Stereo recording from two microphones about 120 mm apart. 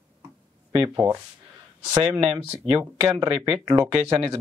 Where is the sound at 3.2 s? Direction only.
35° right (ahead or behind).